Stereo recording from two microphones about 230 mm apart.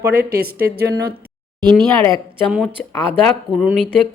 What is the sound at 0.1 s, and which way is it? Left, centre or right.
Speech, right.